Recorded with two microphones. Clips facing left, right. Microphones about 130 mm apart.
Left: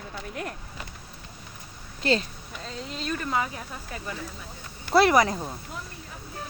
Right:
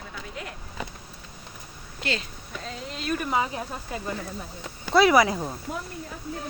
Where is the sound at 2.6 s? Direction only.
Centre (ahead or behind).